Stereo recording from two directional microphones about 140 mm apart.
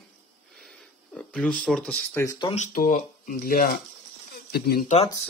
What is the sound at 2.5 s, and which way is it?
Speech, 70° left (ahead or behind).